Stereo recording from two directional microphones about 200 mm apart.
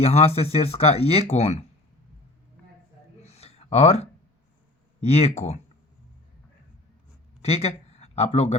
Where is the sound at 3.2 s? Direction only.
30° left (ahead or behind).